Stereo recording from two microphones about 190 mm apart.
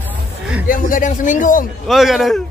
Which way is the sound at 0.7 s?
45° left (ahead or behind).